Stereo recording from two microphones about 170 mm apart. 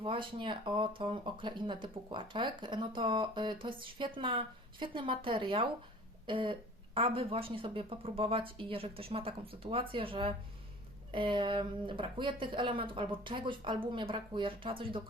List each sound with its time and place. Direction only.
0.0 s speech: 30° right (ahead or behind)